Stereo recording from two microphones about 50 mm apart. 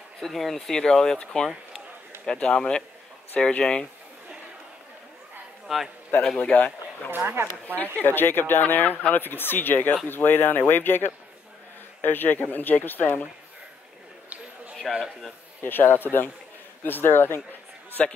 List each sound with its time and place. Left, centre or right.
0.2 s speech: centre
5.7 s a man's voice: centre
7.1 s speech: right
7.6 s speech: left
14.8 s a man's voice: centre
15.6 s a man's voice: left